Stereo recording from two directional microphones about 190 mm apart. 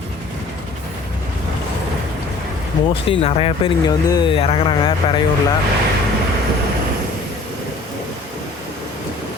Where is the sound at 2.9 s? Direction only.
30° left (ahead or behind).